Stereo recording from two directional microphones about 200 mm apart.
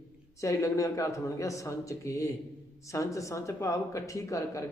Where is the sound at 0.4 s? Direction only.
15° left (ahead or behind).